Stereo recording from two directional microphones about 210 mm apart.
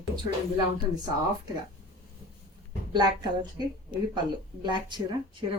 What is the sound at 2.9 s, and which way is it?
Speech, 20° right (ahead or behind).